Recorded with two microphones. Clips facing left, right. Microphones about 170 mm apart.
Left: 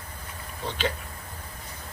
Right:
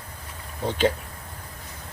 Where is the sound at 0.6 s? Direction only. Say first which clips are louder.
Right 7 dB; 50° right (ahead or behind).